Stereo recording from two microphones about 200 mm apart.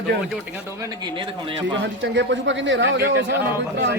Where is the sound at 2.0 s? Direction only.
65° right (ahead or behind).